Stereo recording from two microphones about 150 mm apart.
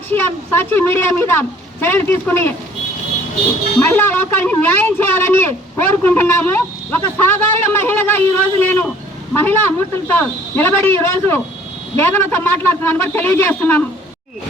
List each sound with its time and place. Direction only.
0.1 s a man's voice: 15° left (ahead or behind)
3.8 s a man's voice: 15° left (ahead or behind)